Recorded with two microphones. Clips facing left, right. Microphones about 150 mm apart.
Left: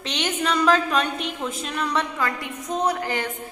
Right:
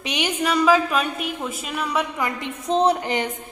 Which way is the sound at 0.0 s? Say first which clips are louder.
Right 2 dB; 10° right (ahead or behind).